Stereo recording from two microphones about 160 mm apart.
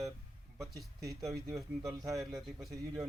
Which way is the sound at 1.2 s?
20° right (ahead or behind).